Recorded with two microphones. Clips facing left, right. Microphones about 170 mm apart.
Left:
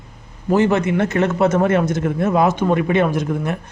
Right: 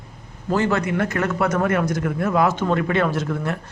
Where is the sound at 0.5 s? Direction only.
20° left (ahead or behind).